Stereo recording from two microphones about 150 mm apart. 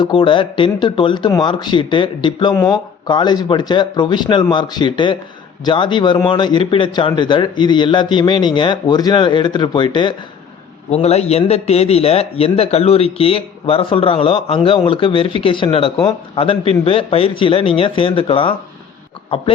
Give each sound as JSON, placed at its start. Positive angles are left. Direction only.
{"t": 0.0, "sound": "a man's voice", "side_deg": 35}
{"t": 10.9, "sound": "a man's voice", "side_deg": 45}